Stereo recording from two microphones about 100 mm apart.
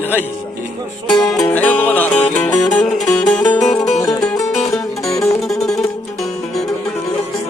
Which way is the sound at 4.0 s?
35° left (ahead or behind).